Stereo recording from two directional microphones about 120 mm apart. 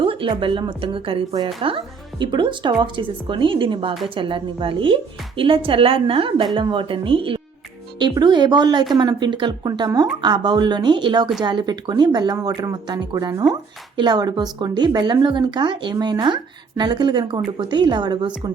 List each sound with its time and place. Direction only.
0.0 s speech: 45° right (ahead or behind)
1.3 s speech: 35° right (ahead or behind)